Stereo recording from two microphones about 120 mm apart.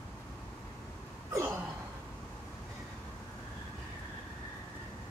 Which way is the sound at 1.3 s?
25° right (ahead or behind).